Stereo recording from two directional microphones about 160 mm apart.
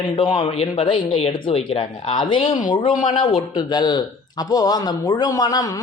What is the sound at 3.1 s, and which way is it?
Speech, 30° left (ahead or behind).